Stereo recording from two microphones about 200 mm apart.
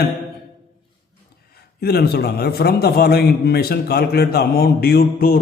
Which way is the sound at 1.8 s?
50° left (ahead or behind).